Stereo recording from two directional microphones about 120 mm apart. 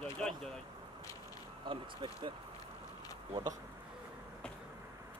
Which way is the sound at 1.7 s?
45° right (ahead or behind).